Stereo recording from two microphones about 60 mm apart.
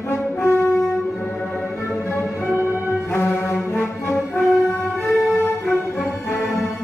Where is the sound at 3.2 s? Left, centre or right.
Left.